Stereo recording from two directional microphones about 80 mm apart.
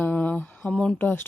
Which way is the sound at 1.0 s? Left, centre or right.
Left.